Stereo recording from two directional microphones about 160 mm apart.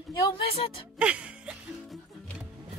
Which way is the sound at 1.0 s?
5° right (ahead or behind).